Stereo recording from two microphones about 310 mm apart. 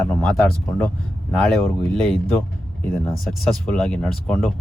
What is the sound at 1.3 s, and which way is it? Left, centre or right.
Speech, centre.